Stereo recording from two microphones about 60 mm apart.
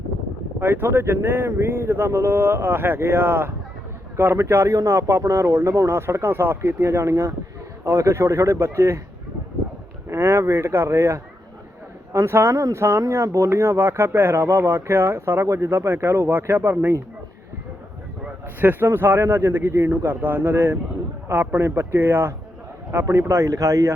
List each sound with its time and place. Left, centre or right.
0.6 s a man's voice: right
10.1 s speech: right
12.1 s speech: right
13.0 s speech: right
18.6 s a man's voice: right
19.2 s a man's voice: right